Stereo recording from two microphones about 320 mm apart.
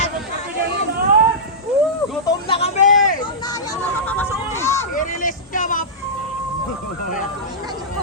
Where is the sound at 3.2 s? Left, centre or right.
Centre.